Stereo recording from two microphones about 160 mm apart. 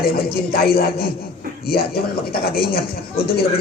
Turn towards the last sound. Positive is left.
turn(degrees=75)  # may be behind; listen again after turning